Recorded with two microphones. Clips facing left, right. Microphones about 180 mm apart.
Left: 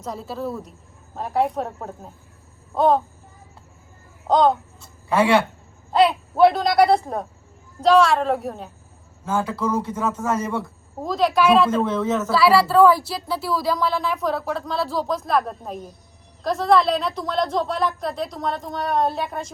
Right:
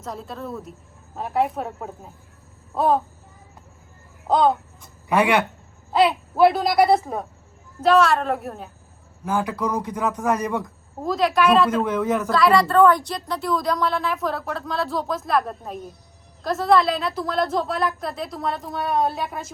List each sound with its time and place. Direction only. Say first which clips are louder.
0.0 s a woman's voice: left 4 dB; centre (ahead or behind)
4.3 s a woman's voice: left 1 dB; 5° right (ahead or behind)
4.8 s a sound: even; 15° right (ahead or behind)
5.9 s a woman's voice: left 1 dB; centre (ahead or behind)
9.2 s a man's voice: even; 15° right (ahead or behind)
11.0 s a woman's voice: left 1 dB; centre (ahead or behind)
11.9 s a man's voice: even; 10° right (ahead or behind)
12.3 s a woman's voice: left 1 dB; 5° left (ahead or behind)